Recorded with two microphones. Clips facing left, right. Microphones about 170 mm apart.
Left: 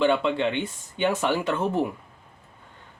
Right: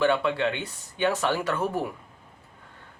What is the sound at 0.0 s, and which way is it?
Speech, 20° left (ahead or behind).